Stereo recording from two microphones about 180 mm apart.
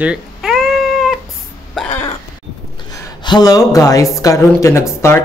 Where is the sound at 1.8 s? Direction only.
Centre (ahead or behind).